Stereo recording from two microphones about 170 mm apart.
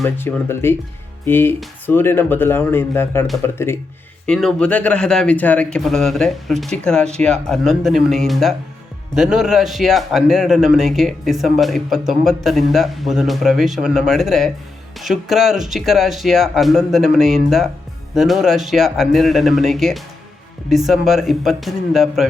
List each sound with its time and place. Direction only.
0.0 s speech: 10° left (ahead or behind)
4.3 s a man's voice: 5° left (ahead or behind)